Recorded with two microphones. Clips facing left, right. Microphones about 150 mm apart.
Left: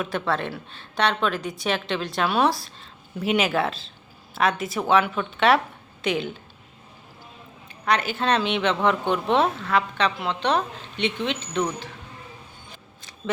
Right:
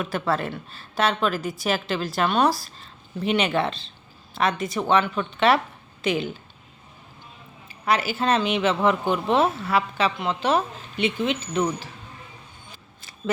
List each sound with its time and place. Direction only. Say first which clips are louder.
0.0 s speech: right 1 dB; centre (ahead or behind)
7.7 s speech: even; 5° right (ahead or behind)
13.0 s a sound: right 2 dB; 5° right (ahead or behind)